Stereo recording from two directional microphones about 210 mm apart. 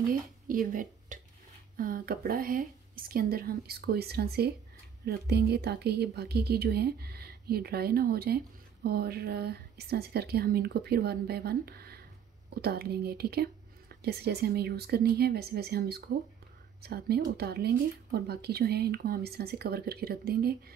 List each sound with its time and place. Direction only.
0.1 s speech: 40° right (ahead or behind)